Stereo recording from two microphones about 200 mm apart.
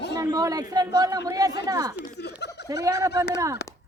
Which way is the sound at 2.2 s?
55° left (ahead or behind).